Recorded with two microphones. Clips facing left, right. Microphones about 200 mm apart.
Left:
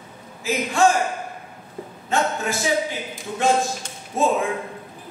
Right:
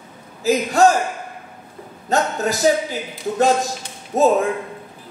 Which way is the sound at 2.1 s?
40° right (ahead or behind).